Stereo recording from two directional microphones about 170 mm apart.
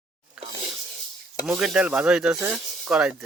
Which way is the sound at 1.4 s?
Centre (ahead or behind).